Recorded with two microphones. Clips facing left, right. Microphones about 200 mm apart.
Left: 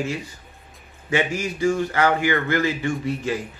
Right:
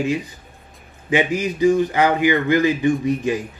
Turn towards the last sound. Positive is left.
turn(degrees=-15)  # may be behind; listen again after turning